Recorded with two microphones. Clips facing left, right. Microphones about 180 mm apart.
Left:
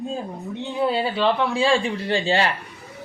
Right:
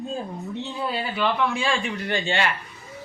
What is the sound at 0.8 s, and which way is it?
A man's voice, 25° left (ahead or behind).